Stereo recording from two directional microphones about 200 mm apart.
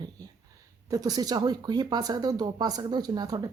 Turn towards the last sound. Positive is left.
turn(degrees=-20)  # may be behind; listen again after turning